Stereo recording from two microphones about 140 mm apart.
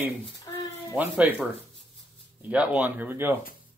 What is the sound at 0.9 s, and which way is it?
Speech, 15° right (ahead or behind).